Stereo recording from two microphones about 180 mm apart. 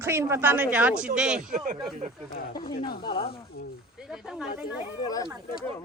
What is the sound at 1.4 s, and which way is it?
Speech, 45° right (ahead or behind).